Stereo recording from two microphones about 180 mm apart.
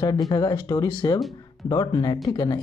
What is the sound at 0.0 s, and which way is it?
Speech, 20° left (ahead or behind).